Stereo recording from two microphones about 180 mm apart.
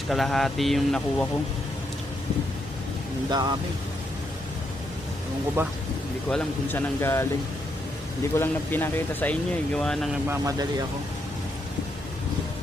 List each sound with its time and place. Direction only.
0.1 s speech: centre (ahead or behind)
3.2 s speech: 20° right (ahead or behind)
5.6 s speech: 15° right (ahead or behind)
6.3 s speech: 10° left (ahead or behind)
8.4 s speech: 10° left (ahead or behind)
10.2 s speech: 20° right (ahead or behind)